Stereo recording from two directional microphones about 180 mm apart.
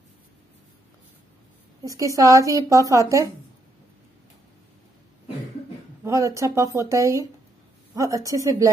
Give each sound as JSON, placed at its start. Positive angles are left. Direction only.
{"t": 1.9, "sound": "speech", "side_deg": -20}
{"t": 6.0, "sound": "speech", "side_deg": -15}